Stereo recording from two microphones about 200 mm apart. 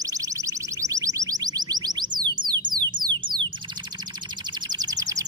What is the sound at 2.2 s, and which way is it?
Music, 20° right (ahead or behind).